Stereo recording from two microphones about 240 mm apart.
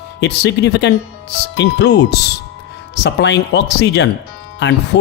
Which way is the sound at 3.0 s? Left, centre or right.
Left.